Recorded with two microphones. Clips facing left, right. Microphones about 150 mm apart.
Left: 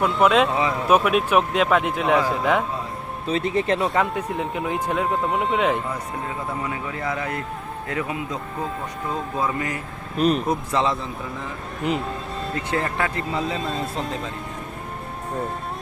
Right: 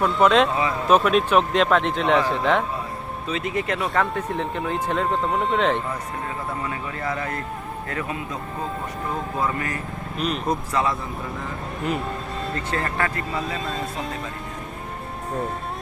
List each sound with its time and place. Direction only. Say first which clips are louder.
0.0 s speech: even; 5° left (ahead or behind)
3.2 s speech: left 4 dB; 30° left (ahead or behind)
4.0 s speech: even; 10° left (ahead or behind)
9.4 s speech: left 1 dB; 15° left (ahead or behind)
10.2 s speech: left 7 dB; 40° left (ahead or behind)
10.7 s speech: left 2 dB; 20° left (ahead or behind)
12.5 s speech: left 2 dB; 15° left (ahead or behind)
13.3 s speech: left 2 dB; centre (ahead or behind)